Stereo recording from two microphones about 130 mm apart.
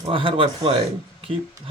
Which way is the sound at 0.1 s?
45° right (ahead or behind).